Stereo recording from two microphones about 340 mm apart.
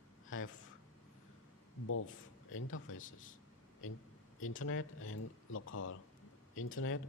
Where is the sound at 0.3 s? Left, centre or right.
Left.